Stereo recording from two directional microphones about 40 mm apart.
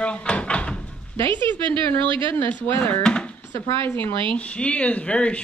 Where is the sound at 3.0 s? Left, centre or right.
Left.